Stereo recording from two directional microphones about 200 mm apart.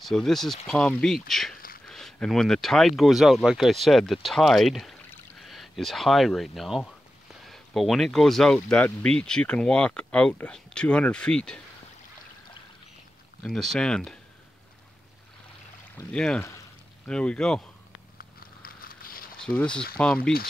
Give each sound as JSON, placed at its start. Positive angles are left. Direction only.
{"t": 0.0, "sound": "speech", "side_deg": 0}
{"t": 13.4, "sound": "speech", "side_deg": 0}
{"t": 16.1, "sound": "speech", "side_deg": 5}
{"t": 18.1, "sound": "a sound", "side_deg": 45}
{"t": 19.4, "sound": "speech", "side_deg": 5}